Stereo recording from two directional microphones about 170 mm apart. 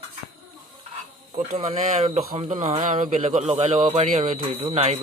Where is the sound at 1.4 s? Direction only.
45° right (ahead or behind).